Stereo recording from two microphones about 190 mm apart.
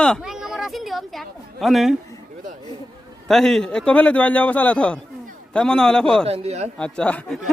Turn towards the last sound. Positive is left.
turn(degrees=5)  # may be behind; listen again after turning